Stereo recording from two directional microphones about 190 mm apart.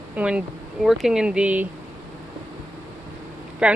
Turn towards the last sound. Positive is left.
turn(degrees=-5)  # may be behind; listen again after turning